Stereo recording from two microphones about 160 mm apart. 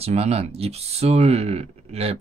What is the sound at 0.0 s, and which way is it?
Speech, 40° right (ahead or behind).